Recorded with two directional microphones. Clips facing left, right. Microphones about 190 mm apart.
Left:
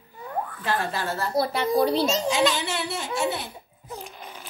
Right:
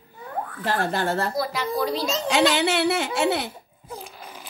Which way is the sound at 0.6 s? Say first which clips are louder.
Right 5 dB; 65° right (ahead or behind).